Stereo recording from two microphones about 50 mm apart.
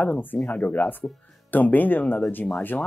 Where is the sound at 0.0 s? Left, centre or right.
Left.